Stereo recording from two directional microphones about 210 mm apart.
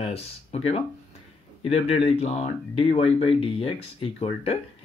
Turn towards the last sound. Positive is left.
turn(degrees=30)  # may be behind; listen again after turning